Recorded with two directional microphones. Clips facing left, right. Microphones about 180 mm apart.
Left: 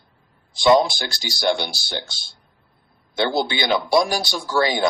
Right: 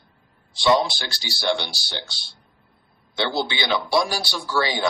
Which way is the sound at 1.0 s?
45° left (ahead or behind).